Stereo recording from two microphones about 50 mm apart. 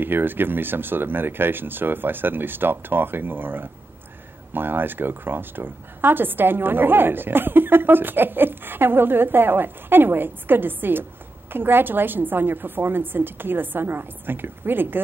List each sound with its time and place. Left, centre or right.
0.0 s a woman's voice: right